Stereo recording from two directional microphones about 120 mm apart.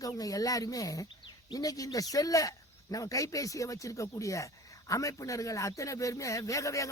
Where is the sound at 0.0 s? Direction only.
30° left (ahead or behind).